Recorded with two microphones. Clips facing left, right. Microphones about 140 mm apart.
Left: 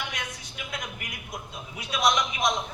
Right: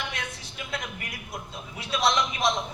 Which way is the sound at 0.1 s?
30° right (ahead or behind).